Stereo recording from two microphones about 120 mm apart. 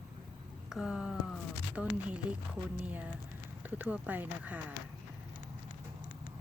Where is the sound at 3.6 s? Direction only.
15° right (ahead or behind).